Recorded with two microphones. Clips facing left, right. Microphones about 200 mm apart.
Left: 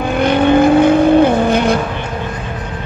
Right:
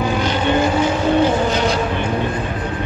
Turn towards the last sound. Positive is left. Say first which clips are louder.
# left 5 dB
turn(degrees=55)  # may be behind; listen again after turning